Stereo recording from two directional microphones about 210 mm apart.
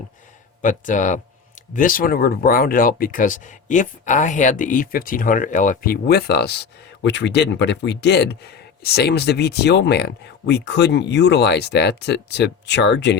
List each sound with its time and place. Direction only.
0.6 s speech: 35° left (ahead or behind); by 13.1 s 55° left (ahead or behind)